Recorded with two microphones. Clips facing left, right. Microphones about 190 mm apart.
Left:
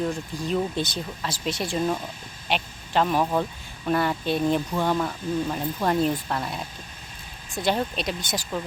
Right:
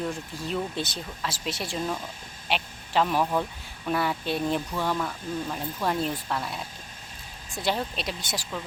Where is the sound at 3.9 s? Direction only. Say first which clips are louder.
Left 3 dB; 5° right (ahead or behind).